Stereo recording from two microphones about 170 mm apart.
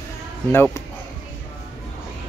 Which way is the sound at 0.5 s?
15° left (ahead or behind).